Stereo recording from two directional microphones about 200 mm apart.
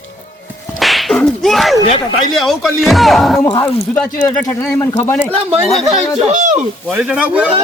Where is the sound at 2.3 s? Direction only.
Centre (ahead or behind).